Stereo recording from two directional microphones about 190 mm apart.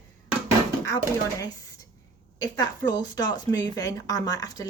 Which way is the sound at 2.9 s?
20° left (ahead or behind).